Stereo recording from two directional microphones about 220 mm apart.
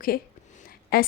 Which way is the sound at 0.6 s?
40° left (ahead or behind).